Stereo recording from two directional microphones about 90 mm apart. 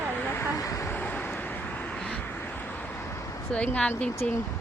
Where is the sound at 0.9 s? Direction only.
20° left (ahead or behind).